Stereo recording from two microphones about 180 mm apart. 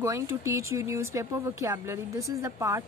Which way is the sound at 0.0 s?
15° right (ahead or behind).